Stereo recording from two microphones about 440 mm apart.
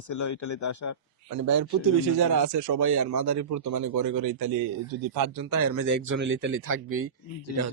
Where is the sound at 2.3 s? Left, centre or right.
Right.